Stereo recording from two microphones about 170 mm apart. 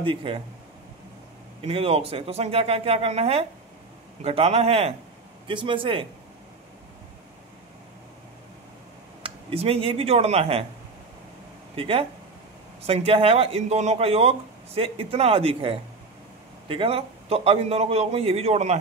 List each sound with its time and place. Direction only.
0.0 s speech: 30° right (ahead or behind)
1.7 s speech: 35° right (ahead or behind)
9.2 s speech: 35° right (ahead or behind)
11.7 s speech: 35° right (ahead or behind)